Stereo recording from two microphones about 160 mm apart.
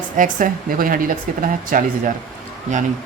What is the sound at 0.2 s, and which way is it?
Speech, 55° right (ahead or behind).